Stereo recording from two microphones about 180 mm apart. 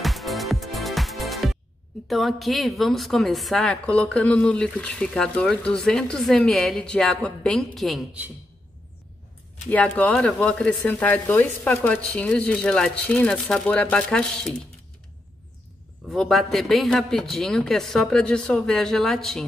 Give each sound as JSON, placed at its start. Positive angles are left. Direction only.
{"t": 0.0, "sound": "music", "side_deg": 0}
{"t": 2.0, "sound": "a woman's voice", "side_deg": 0}
{"t": 9.7, "sound": "a woman's voice", "side_deg": 10}
{"t": 16.1, "sound": "a woman's voice", "side_deg": 0}